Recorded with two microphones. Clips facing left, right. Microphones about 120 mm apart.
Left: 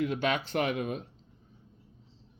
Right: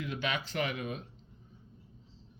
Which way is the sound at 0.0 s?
50° left (ahead or behind).